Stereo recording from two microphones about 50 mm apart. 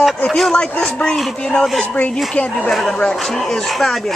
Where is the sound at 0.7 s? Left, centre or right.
Centre.